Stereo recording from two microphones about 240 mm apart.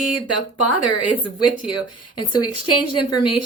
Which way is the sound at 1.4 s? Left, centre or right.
Left.